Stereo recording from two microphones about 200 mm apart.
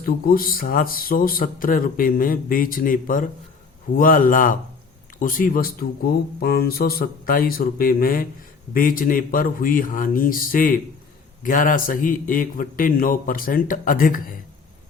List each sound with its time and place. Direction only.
0.0 s speech: 45° left (ahead or behind)